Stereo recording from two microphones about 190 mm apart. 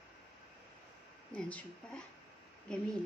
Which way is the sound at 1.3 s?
5° left (ahead or behind).